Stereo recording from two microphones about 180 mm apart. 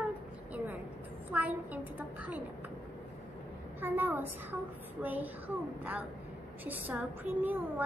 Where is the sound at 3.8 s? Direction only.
10° right (ahead or behind).